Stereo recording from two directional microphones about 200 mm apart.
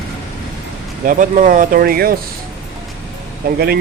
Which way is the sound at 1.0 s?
40° right (ahead or behind).